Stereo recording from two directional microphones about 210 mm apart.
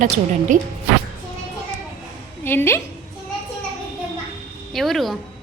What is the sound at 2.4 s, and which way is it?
Speech, 10° left (ahead or behind).